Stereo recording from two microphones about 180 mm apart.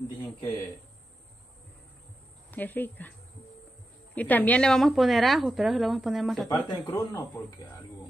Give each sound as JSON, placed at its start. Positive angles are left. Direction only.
{"t": 2.5, "sound": "a woman's voice", "side_deg": 10}
{"t": 6.5, "sound": "speech", "side_deg": 20}